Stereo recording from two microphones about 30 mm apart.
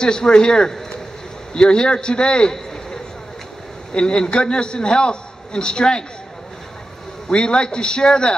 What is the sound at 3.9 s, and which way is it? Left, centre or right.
A man's voice, left.